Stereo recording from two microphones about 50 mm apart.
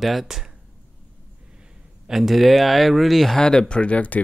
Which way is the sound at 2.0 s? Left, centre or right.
Centre.